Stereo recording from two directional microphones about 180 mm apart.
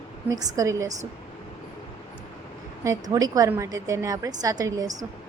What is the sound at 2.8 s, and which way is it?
A woman's voice, 15° right (ahead or behind).